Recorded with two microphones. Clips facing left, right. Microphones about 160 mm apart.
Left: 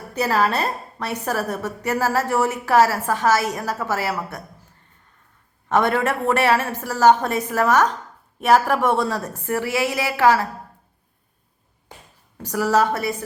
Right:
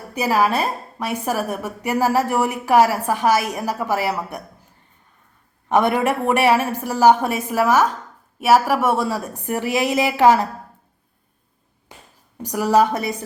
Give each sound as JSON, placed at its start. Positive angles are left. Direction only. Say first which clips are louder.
{"t": 0.1, "sound": "a woman's voice", "louder": "right 2 dB", "side_deg": -10}
{"t": 5.6, "sound": "a woman's voice", "louder": "right 2 dB", "side_deg": -15}
{"t": 12.4, "sound": "a woman's voice", "louder": "right 2 dB", "side_deg": -15}